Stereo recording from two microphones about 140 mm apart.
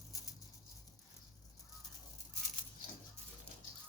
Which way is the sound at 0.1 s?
25° left (ahead or behind).